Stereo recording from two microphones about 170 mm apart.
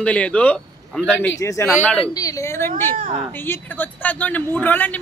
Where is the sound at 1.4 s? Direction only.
20° left (ahead or behind).